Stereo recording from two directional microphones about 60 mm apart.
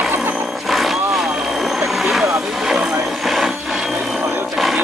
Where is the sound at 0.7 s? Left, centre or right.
Centre.